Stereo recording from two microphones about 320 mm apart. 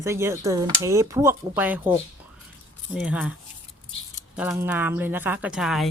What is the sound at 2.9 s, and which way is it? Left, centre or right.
Speech, centre.